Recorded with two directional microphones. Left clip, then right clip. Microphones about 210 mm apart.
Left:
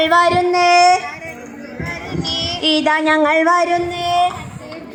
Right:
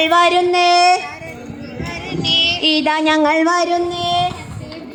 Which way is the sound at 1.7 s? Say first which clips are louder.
Even; 30° right (ahead or behind).